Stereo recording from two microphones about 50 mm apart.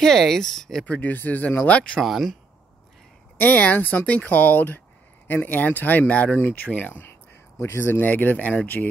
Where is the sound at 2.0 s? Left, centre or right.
Centre.